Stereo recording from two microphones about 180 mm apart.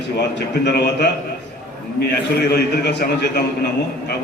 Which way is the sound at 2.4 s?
65° left (ahead or behind).